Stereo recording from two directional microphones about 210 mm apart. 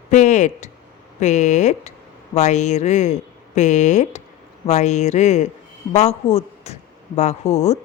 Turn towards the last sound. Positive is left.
turn(degrees=30)  # may be behind; listen again after turning